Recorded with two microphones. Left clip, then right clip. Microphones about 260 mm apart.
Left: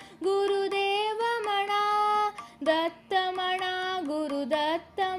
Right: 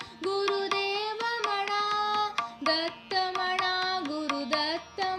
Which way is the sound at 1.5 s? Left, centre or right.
Centre.